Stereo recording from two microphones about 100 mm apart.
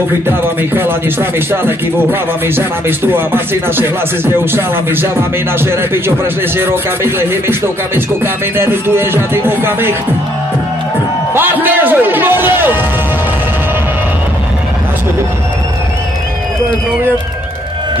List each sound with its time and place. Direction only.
0.4 s speech: 20° right (ahead or behind)
11.3 s speech: 20° right (ahead or behind)